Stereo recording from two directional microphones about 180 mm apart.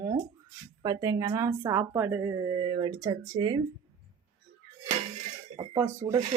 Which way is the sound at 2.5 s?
30° right (ahead or behind).